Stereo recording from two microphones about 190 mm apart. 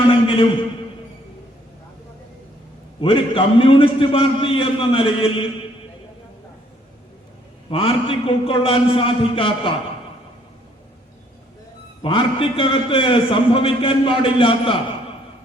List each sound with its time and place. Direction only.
0.1 s a sound: 30° left (ahead or behind)
3.0 s a man's voice: 30° left (ahead or behind)
7.7 s a man's voice: 30° left (ahead or behind)
12.0 s a man's voice: 25° left (ahead or behind)